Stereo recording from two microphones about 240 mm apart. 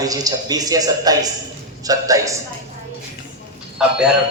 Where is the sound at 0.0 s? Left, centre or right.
Centre.